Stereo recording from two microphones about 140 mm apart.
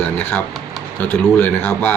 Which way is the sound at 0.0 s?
15° left (ahead or behind).